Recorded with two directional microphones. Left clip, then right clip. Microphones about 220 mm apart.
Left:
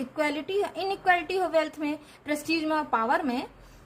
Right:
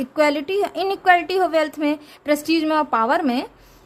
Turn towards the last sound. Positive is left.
turn(degrees=-40)  # may be behind; listen again after turning